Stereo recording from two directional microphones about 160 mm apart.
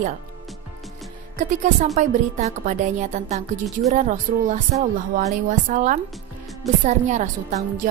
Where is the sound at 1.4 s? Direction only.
50° right (ahead or behind).